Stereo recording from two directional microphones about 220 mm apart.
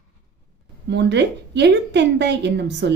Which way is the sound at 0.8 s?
50° right (ahead or behind).